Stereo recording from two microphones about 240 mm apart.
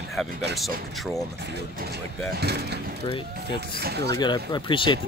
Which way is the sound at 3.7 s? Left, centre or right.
Right.